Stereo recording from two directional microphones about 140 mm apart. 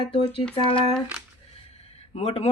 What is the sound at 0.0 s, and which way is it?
Speech, 40° left (ahead or behind).